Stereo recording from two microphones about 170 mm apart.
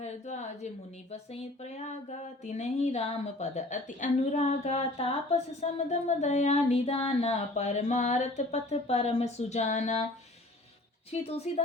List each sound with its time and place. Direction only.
0.0 s a woman's voice: 45° left (ahead or behind)
11.1 s speech: 35° left (ahead or behind)